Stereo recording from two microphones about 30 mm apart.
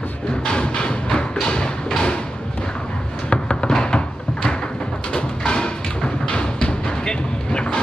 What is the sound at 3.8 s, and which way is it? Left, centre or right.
Cupboard open or close, left.